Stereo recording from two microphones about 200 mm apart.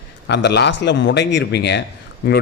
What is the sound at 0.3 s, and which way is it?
Speech, 60° left (ahead or behind).